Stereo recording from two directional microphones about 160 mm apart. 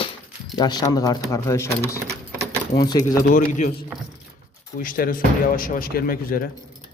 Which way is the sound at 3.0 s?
60° left (ahead or behind).